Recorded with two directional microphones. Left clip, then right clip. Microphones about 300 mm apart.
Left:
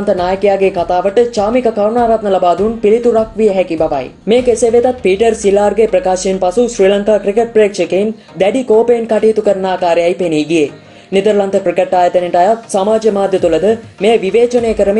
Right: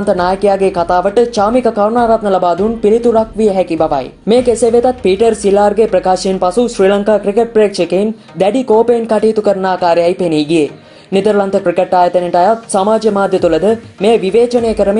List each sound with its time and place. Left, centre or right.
0.0 s speech: centre